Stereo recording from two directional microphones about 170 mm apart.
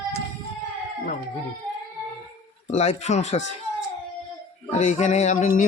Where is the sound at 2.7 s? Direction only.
40° left (ahead or behind).